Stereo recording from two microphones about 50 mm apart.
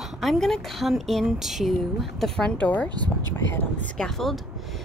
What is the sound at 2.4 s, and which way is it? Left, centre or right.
Speech, left.